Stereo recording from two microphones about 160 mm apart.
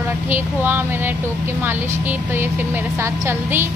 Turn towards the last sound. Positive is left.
turn(degrees=-15)  # may be behind; listen again after turning